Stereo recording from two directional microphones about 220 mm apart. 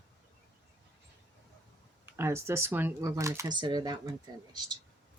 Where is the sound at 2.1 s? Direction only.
10° right (ahead or behind).